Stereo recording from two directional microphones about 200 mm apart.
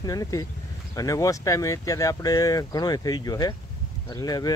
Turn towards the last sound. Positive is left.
turn(degrees=20)  # may be behind; listen again after turning